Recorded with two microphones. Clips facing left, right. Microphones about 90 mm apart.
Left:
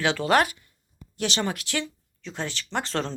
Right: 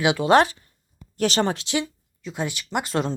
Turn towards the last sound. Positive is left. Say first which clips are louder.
# right 3 dB
turn(degrees=-10)  # may be behind; listen again after turning